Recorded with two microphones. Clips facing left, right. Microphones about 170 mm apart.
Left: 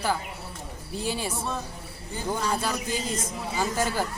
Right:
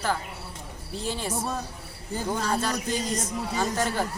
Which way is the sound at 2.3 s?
5° left (ahead or behind).